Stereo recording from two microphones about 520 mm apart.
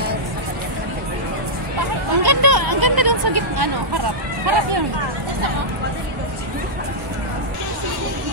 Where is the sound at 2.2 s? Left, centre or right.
Right.